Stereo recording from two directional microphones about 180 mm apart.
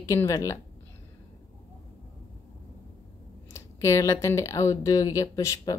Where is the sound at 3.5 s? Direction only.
15° left (ahead or behind).